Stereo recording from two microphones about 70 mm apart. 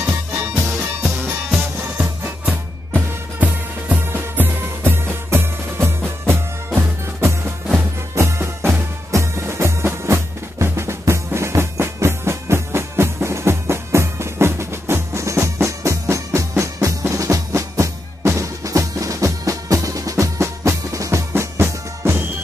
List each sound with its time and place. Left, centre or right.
0.0 s music: right
2.9 s music: right